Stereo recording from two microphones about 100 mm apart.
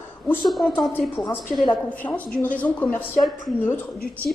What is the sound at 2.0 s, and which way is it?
Speech, 35° left (ahead or behind).